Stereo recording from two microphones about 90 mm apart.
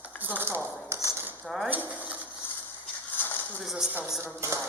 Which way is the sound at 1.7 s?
20° right (ahead or behind).